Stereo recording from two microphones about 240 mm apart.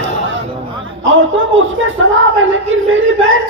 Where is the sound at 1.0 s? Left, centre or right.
Right.